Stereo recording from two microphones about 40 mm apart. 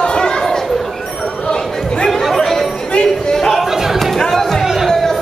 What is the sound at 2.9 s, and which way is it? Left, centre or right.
Music, centre.